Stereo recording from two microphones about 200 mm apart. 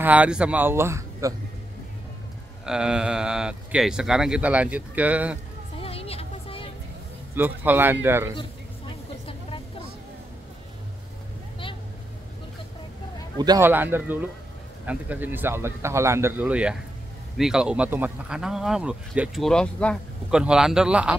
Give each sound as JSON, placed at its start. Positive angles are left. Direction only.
{"t": 0.0, "sound": "speech", "side_deg": -5}
{"t": 2.6, "sound": "speech", "side_deg": -5}
{"t": 5.8, "sound": "music", "side_deg": 30}
{"t": 7.3, "sound": "speech", "side_deg": -10}
{"t": 9.2, "sound": "vehicle", "side_deg": 30}
{"t": 13.4, "sound": "speech", "side_deg": -15}